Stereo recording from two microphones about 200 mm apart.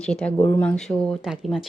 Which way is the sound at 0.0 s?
5° left (ahead or behind).